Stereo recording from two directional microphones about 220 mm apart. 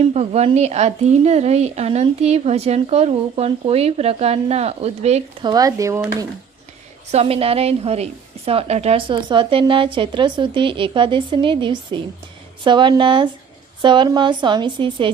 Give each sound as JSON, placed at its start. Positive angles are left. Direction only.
{"t": 0.0, "sound": "a woman's voice", "side_deg": -30}
{"t": 7.1, "sound": "a woman's voice", "side_deg": -25}